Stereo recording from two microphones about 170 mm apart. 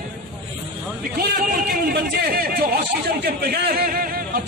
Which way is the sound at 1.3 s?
60° right (ahead or behind).